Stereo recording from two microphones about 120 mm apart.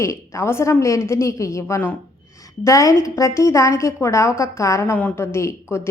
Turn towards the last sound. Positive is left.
turn(degrees=25)  # may be behind; listen again after turning